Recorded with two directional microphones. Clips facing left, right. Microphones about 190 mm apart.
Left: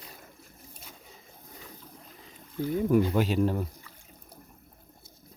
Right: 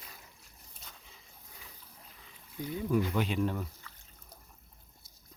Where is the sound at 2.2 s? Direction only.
45° left (ahead or behind).